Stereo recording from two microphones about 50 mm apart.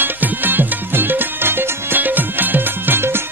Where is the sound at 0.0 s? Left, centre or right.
Right.